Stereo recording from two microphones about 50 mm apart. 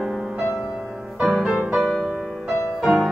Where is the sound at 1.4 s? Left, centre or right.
Centre.